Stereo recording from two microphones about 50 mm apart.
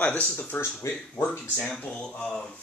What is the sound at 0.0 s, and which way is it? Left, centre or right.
Speech, left.